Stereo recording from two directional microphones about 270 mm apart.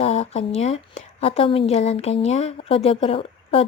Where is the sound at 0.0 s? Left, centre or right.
Left.